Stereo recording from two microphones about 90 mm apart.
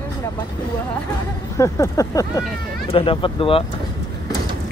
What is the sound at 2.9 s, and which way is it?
Speech, 85° left.